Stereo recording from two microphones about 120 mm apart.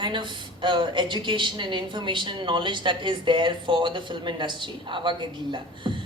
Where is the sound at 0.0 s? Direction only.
40° right (ahead or behind).